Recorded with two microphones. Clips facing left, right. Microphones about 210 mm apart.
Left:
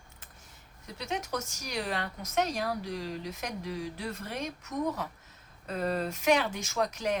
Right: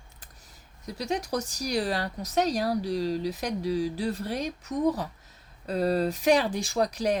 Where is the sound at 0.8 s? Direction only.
35° right (ahead or behind).